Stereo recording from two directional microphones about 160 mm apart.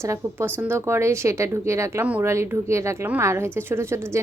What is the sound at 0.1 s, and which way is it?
Speech, 15° right (ahead or behind).